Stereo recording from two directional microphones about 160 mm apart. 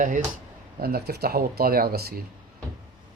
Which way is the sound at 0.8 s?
75° right (ahead or behind).